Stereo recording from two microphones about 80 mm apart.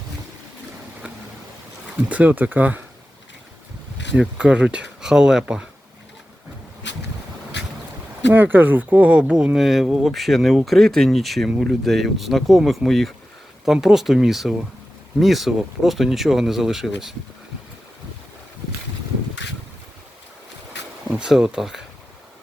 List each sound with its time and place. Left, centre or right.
2.0 s speech: centre
4.2 s speech: centre
8.3 s speech: right; by 17.2 s centre
21.1 s speech: centre